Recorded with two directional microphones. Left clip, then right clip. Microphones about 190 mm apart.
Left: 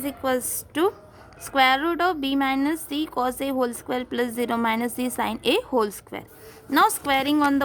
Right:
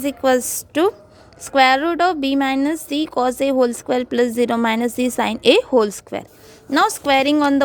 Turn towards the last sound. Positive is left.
turn(degrees=-25)  # may be behind; listen again after turning